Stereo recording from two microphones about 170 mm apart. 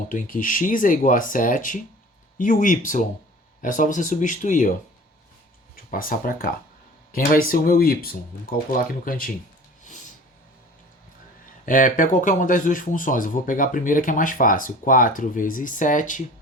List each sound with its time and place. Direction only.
0.1 s speech: 50° left (ahead or behind)
5.7 s speech: 55° left (ahead or behind)
11.6 s speech: 50° left (ahead or behind)